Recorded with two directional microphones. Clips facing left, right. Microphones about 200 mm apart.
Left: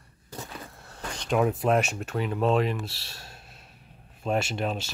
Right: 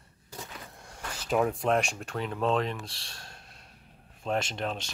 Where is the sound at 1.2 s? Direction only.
5° left (ahead or behind).